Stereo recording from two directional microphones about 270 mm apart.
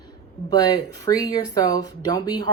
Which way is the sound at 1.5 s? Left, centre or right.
Centre.